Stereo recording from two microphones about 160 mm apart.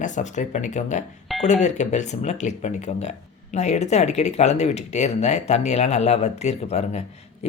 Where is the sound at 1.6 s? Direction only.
45° left (ahead or behind).